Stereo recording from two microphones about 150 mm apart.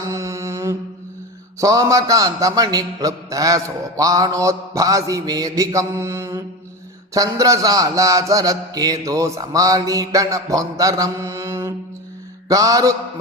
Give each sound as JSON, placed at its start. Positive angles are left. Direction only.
{"t": 0.0, "sound": "mantra", "side_deg": -20}
{"t": 1.6, "sound": "a man's voice", "side_deg": -20}